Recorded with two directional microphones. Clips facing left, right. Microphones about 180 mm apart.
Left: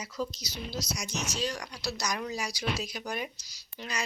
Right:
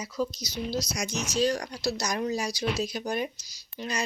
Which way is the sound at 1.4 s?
45° right (ahead or behind).